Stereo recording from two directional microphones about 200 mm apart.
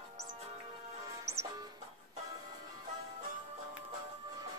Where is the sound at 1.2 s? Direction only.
15° right (ahead or behind).